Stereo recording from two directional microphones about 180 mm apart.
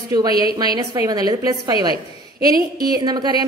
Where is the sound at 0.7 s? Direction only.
20° right (ahead or behind).